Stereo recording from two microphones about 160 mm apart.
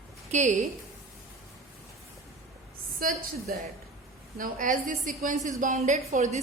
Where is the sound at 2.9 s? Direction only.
65° right (ahead or behind).